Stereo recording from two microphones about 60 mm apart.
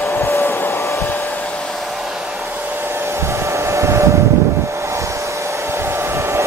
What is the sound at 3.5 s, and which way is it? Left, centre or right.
Vehicle, right.